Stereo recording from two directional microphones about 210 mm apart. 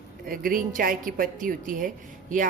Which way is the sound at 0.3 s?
40° right (ahead or behind).